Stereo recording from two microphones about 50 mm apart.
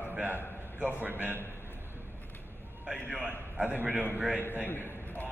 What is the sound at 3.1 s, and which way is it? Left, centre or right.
Speech, centre.